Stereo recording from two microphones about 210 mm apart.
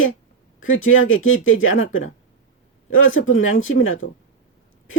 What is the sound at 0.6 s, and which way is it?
Speech, 70° left (ahead or behind).